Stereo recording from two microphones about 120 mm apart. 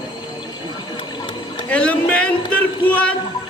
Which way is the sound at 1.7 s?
10° left (ahead or behind).